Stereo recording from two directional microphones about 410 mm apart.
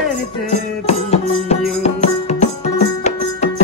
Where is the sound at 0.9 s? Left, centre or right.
Centre.